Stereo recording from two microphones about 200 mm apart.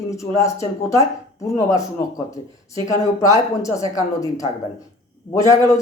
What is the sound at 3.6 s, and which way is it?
Speech, 15° left (ahead or behind).